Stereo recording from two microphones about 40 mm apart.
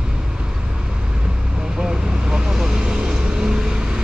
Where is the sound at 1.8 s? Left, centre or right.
Centre.